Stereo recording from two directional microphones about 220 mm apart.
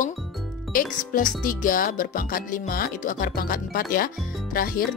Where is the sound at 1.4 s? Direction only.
40° left (ahead or behind).